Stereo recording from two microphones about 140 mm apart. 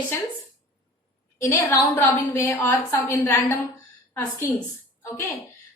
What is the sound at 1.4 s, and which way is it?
A woman's voice, 15° left (ahead or behind).